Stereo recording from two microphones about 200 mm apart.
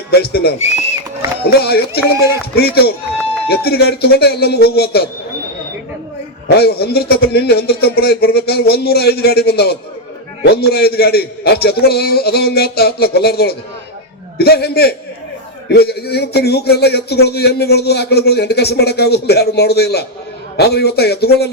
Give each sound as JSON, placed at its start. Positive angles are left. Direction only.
{"t": 0.1, "sound": "a man's voice", "side_deg": 50}
{"t": 6.5, "sound": "a man's voice", "side_deg": 55}